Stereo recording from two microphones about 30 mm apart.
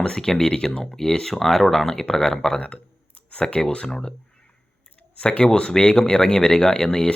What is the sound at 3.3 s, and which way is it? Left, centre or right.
Speech, left.